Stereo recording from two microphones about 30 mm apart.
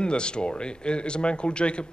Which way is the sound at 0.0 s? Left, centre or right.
Left.